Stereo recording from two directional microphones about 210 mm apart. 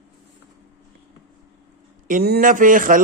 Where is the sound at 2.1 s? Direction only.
50° right (ahead or behind).